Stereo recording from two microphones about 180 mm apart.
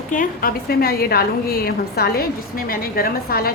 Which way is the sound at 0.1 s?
50° left (ahead or behind).